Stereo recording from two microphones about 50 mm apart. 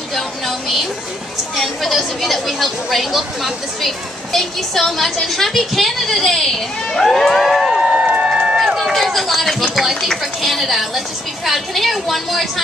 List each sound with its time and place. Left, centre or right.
0.1 s speech: centre
7.9 s a sound: right
8.7 s speech: centre